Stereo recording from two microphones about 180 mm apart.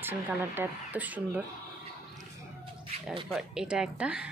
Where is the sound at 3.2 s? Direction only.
5° right (ahead or behind).